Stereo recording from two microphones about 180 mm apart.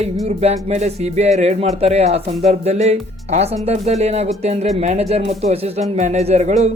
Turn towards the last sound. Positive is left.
turn(degrees=-40)  # may be behind; listen again after turning